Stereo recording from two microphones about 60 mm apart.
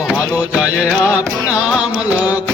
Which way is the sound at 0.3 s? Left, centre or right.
Right.